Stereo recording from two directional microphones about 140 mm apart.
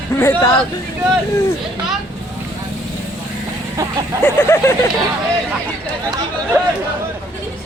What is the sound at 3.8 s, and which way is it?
Vehicle, 20° right (ahead or behind).